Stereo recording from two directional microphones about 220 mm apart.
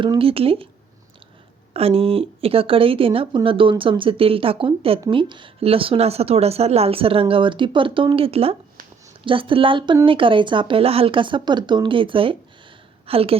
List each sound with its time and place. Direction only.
0.0 s speech: 25° right (ahead or behind)
1.7 s speech: 25° right (ahead or behind)